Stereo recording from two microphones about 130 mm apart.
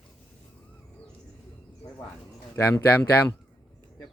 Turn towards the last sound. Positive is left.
turn(degrees=15)  # may be behind; listen again after turning